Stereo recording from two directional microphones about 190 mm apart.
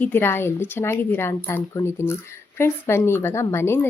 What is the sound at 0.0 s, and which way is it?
Speech, 10° left (ahead or behind).